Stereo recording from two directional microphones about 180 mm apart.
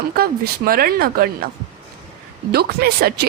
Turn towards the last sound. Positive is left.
turn(degrees=-60)  # may be behind; listen again after turning